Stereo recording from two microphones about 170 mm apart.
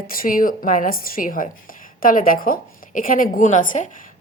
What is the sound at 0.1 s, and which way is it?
A woman's voice, 55° left (ahead or behind).